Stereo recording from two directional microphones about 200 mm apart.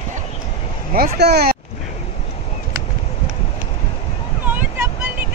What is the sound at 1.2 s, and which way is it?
Speech, 55° right (ahead or behind).